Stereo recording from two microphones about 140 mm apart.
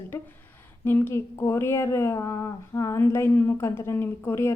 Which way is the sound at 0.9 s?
15° left (ahead or behind).